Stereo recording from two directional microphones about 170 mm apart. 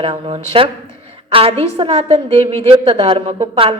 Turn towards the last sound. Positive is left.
turn(degrees=-35)  # may be behind; listen again after turning